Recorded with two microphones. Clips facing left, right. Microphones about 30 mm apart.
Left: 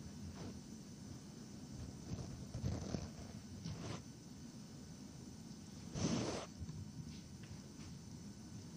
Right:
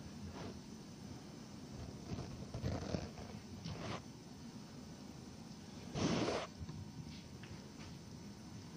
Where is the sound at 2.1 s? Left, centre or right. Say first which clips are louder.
Right 3 dB; right.